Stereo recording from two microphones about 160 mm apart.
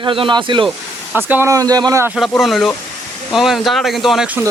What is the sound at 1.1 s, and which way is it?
Speech, 10° right (ahead or behind).